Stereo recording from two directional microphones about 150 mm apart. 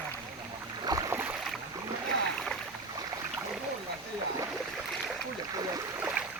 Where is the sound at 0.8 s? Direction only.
20° right (ahead or behind).